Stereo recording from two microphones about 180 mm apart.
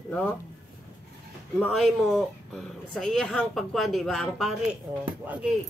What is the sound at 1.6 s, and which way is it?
Speech, centre (ahead or behind).